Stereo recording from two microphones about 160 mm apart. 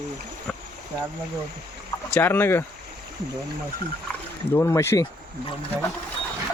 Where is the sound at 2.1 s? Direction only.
15° left (ahead or behind).